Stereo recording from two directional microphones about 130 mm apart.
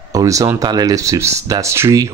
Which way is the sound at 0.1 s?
25° right (ahead or behind).